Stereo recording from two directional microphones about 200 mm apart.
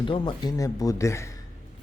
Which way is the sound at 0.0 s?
25° left (ahead or behind).